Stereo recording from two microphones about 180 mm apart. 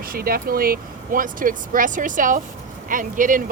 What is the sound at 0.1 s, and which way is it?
Speech, 55° right (ahead or behind).